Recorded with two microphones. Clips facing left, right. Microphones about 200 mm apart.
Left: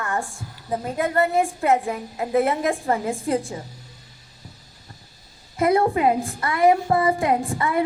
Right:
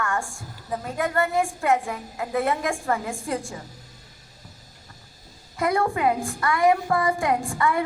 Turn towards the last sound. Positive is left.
turn(degrees=20)  # may be behind; listen again after turning